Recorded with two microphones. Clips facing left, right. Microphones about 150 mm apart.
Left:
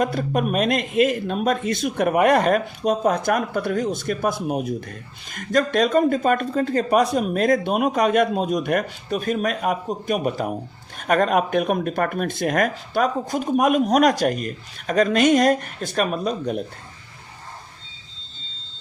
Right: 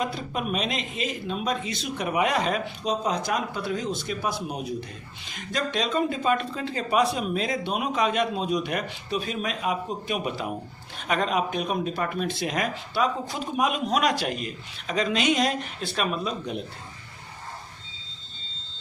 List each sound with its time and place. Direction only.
0.0 s speech: 50° left (ahead or behind)